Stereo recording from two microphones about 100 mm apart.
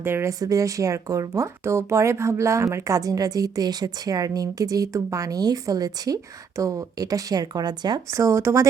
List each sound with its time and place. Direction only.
0.0 s speech: 25° right (ahead or behind); by 8.0 s 45° right (ahead or behind)
8.1 s speech: 30° right (ahead or behind)